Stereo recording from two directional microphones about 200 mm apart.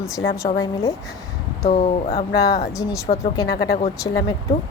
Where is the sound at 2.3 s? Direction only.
15° left (ahead or behind).